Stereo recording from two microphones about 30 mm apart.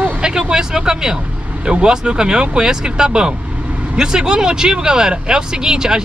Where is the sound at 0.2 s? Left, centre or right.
Right.